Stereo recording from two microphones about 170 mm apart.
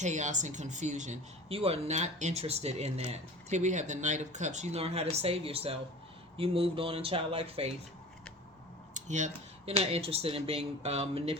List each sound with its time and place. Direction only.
0.0 s speech: 45° right (ahead or behind)
8.9 s a sound: 45° right (ahead or behind)
9.8 s speech: 35° right (ahead or behind)